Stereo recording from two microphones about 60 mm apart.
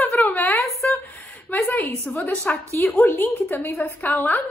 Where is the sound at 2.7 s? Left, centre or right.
Left.